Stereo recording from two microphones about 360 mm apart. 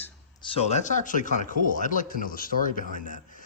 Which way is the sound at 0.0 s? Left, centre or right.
Centre.